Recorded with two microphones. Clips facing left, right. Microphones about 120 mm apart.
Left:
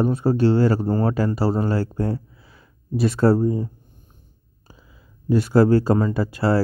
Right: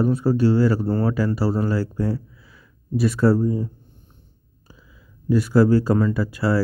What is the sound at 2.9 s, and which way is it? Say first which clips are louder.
Speech: left 1 dB; 25° left (ahead or behind).